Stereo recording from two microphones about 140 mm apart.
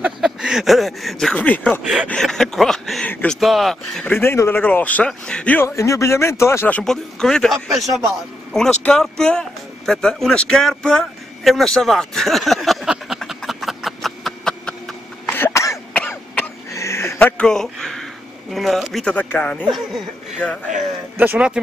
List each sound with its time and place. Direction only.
0.0 s speech: 5° right (ahead or behind); by 1.8 s 10° left (ahead or behind)
1.8 s a man's voice: centre (ahead or behind)
3.3 s speech: centre (ahead or behind)
4.1 s a man's voice: 15° left (ahead or behind)
6.8 s speech: 5° left (ahead or behind)
15.3 s cough: 20° left (ahead or behind)
17.4 s a man's voice: 5° left (ahead or behind)
21.2 s speech: 10° right (ahead or behind)